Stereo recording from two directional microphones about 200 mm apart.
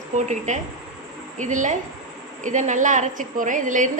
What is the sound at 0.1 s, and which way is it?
Speech, 40° right (ahead or behind).